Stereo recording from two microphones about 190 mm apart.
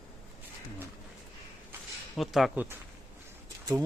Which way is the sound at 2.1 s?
Centre (ahead or behind).